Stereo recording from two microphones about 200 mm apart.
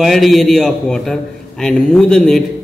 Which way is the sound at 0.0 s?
Centre (ahead or behind).